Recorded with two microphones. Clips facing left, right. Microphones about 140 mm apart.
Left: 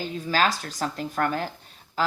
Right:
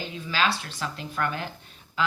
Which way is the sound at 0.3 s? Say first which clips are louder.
Left 2 dB; 40° left (ahead or behind).